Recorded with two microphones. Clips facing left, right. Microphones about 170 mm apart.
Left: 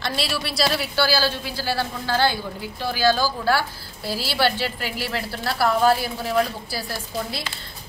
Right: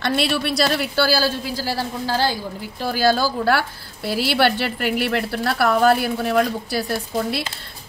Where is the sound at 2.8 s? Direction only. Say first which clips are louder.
Right 2 dB; 45° right (ahead or behind); by 7.4 s 60° right (ahead or behind).